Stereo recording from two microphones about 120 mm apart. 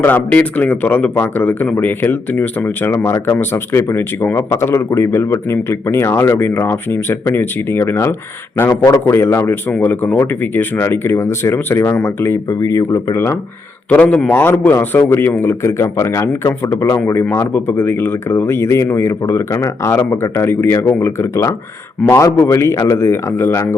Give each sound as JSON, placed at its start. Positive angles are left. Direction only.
{"t": 0.0, "sound": "speech", "side_deg": 15}
{"t": 13.9, "sound": "speech", "side_deg": 10}